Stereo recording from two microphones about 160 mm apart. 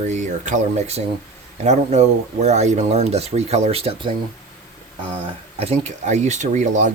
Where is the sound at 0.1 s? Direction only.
50° right (ahead or behind).